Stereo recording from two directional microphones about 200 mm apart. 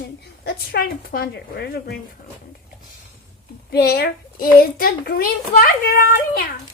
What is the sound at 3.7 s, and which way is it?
A child's voice, 50° left (ahead or behind).